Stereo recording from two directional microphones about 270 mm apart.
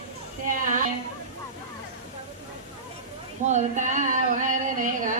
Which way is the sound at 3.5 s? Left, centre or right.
Right.